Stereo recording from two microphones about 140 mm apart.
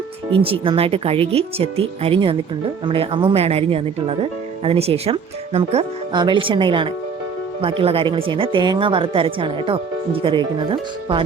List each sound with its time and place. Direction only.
0.3 s speech: 40° right (ahead or behind)